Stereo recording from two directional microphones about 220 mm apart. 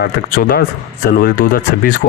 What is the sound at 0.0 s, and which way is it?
Speech, 45° left (ahead or behind).